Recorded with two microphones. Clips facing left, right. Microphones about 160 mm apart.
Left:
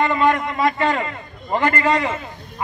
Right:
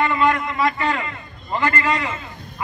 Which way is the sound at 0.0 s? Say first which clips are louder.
Left 1 dB; 30° left (ahead or behind).